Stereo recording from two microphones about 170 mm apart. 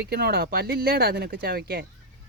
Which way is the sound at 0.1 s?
65° right (ahead or behind).